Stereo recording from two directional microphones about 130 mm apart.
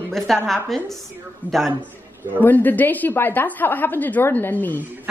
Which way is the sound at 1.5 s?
15° right (ahead or behind).